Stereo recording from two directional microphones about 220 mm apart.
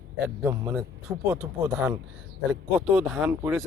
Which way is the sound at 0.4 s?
10° right (ahead or behind).